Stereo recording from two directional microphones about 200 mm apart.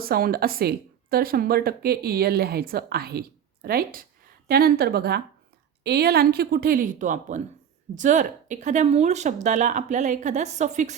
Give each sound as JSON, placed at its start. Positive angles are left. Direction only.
{"t": 0.0, "sound": "a woman's voice", "side_deg": -50}